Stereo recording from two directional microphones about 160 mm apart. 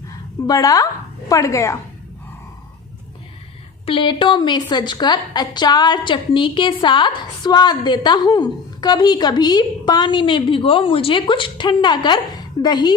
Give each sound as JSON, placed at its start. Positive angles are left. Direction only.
{"t": 0.4, "sound": "a woman's voice", "side_deg": 20}
{"t": 3.8, "sound": "a woman's voice", "side_deg": 30}